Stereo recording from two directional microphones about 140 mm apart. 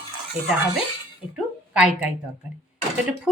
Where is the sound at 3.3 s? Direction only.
5° right (ahead or behind).